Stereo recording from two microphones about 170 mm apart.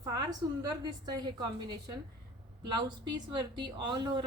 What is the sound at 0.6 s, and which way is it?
Speech, 25° right (ahead or behind).